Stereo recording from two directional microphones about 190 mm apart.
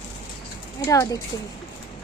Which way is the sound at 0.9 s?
15° left (ahead or behind).